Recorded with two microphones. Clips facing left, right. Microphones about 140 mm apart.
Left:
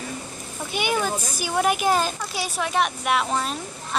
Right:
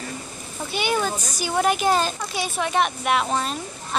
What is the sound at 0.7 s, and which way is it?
A woman's voice, 10° left (ahead or behind).